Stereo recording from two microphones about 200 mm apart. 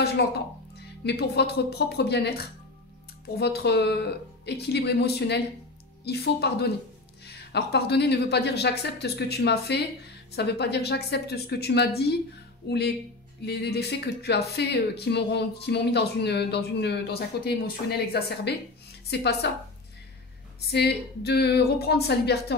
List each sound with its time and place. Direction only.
0.2 s speech: 60° left (ahead or behind)
20.7 s a woman's voice: 55° left (ahead or behind)